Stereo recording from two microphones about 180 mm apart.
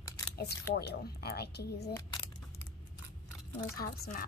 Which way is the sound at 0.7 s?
60° left (ahead or behind).